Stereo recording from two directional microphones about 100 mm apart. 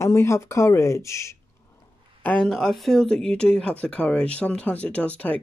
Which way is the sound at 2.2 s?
5° left (ahead or behind).